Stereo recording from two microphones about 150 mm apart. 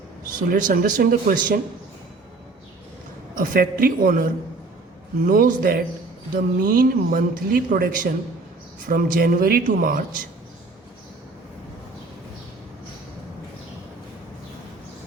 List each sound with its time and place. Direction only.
0.5 s speech: 70° right (ahead or behind)
3.3 s speech: 70° right (ahead or behind)